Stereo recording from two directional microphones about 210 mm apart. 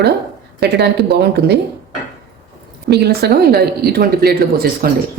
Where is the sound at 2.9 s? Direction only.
50° right (ahead or behind).